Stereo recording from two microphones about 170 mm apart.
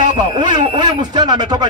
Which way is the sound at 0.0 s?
25° right (ahead or behind).